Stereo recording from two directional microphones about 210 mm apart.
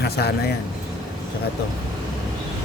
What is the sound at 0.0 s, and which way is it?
Speech, 50° left (ahead or behind).